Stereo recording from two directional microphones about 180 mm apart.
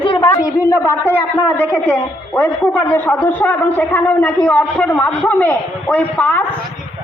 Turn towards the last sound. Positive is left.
turn(degrees=10)  # may be behind; listen again after turning